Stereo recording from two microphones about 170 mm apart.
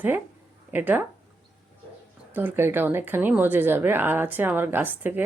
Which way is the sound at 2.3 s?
10° right (ahead or behind).